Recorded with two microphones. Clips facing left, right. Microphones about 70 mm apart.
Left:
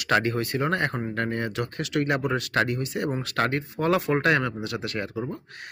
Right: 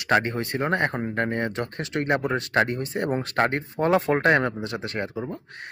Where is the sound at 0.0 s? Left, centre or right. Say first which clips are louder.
Right 1 dB; right.